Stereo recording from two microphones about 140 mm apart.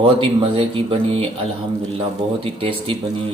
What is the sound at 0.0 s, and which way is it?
Speech, 40° right (ahead or behind).